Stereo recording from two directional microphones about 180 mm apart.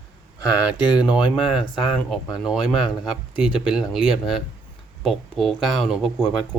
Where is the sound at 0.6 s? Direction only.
5° right (ahead or behind).